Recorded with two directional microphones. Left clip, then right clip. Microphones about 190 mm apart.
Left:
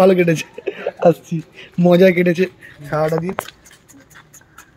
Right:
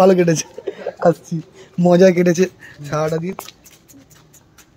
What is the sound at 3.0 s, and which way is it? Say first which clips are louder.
Speech: left 2 dB; 10° left (ahead or behind).